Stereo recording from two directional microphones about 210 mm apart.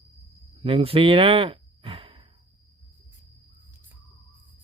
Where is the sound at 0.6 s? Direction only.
25° right (ahead or behind).